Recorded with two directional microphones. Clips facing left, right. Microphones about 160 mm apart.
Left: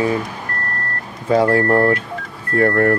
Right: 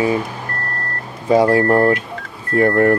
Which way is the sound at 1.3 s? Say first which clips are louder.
Right 2 dB; 15° right (ahead or behind).